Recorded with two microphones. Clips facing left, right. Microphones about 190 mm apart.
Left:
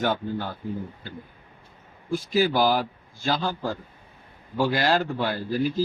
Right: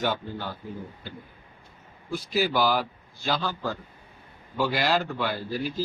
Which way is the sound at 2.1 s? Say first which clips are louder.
Left 3 dB; 45° left (ahead or behind).